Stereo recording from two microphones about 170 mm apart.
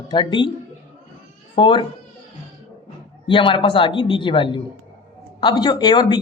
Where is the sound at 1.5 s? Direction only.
30° left (ahead or behind).